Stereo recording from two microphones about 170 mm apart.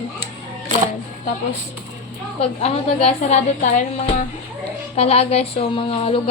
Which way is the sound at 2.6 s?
40° left (ahead or behind).